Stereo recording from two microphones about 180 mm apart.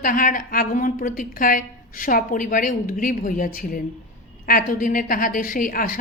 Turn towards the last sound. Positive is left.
turn(degrees=50)  # may be behind; listen again after turning